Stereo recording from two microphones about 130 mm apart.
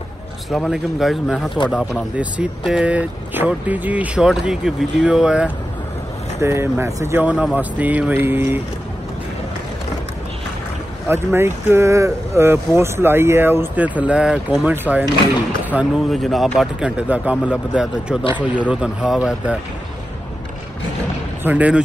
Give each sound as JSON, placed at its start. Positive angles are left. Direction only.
{"t": 0.5, "sound": "speech", "side_deg": 0}
{"t": 6.4, "sound": "speech", "side_deg": -20}
{"t": 11.1, "sound": "speech", "side_deg": -20}
{"t": 21.5, "sound": "speech", "side_deg": -10}